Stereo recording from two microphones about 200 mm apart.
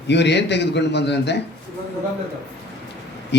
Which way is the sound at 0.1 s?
60° left (ahead or behind).